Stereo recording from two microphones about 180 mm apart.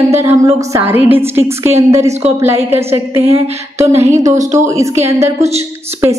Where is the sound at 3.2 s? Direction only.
30° right (ahead or behind).